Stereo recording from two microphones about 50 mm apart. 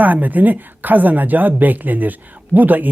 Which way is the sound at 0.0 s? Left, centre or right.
Right.